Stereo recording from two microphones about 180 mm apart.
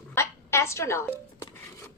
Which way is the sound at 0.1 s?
15° left (ahead or behind).